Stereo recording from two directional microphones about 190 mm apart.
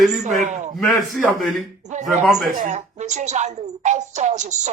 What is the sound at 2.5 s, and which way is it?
Speech, 40° right (ahead or behind).